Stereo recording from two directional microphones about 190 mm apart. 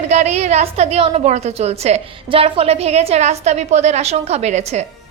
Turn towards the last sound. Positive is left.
turn(degrees=-35)  # may be behind; listen again after turning